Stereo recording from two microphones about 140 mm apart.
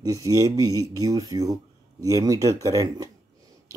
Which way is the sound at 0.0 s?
25° right (ahead or behind).